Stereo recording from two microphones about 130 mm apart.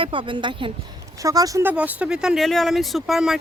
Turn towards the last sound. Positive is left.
turn(degrees=-5)  # may be behind; listen again after turning